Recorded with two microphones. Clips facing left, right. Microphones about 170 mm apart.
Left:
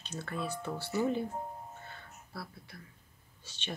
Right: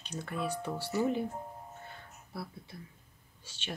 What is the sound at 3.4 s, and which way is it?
Speech, 10° right (ahead or behind).